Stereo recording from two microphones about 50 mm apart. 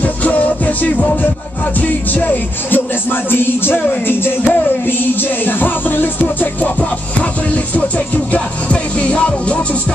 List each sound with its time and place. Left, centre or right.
0.0 s music: left
8.3 s music: left